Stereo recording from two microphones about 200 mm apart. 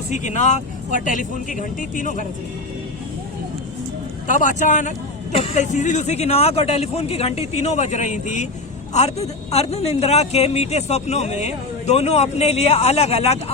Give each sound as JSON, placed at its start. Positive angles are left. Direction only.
{"t": 0.1, "sound": "speech", "side_deg": 35}
{"t": 4.3, "sound": "speech", "side_deg": 40}